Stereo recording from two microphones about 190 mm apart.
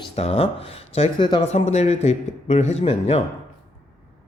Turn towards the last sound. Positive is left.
turn(degrees=30)  # may be behind; listen again after turning